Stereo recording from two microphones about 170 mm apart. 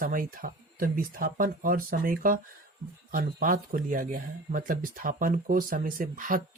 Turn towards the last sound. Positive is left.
turn(degrees=-55)  # may be behind; listen again after turning